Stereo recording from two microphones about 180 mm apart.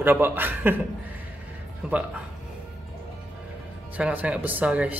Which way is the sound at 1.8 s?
5° right (ahead or behind).